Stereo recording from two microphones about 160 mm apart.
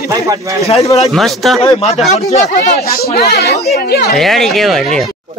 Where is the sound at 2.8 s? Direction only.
70° left (ahead or behind); by 3.6 s 90° left.